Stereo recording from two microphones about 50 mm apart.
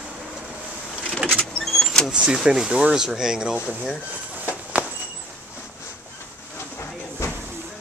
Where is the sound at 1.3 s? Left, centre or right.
Centre.